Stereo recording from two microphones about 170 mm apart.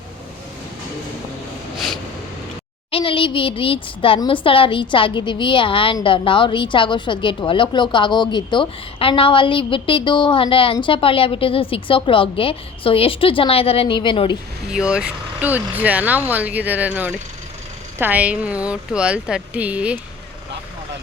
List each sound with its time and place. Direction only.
2.9 s a woman's voice: 30° left (ahead or behind)
14.7 s speech: 5° right (ahead or behind)